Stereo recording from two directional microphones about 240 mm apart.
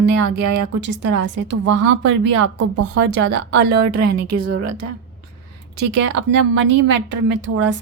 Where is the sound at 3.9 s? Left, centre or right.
Right.